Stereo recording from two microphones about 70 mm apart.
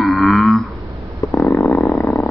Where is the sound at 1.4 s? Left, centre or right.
Left.